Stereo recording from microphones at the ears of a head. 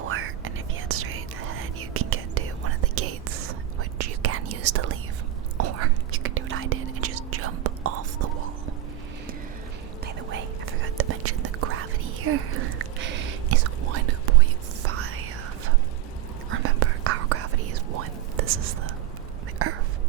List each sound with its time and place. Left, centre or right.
0.0 s whispering: right
10.9 s whispering: right